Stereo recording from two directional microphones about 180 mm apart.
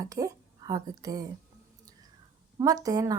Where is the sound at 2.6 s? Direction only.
20° right (ahead or behind).